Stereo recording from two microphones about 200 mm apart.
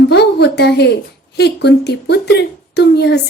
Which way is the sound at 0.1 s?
55° left (ahead or behind).